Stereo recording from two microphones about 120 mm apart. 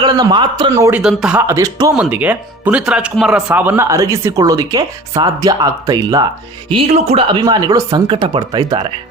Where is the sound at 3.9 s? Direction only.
25° right (ahead or behind).